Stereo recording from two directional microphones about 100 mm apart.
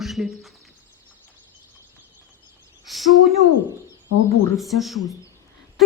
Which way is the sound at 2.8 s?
Centre (ahead or behind).